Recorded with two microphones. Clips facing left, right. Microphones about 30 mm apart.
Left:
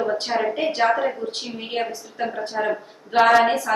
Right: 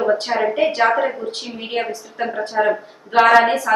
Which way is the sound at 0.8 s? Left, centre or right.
Centre.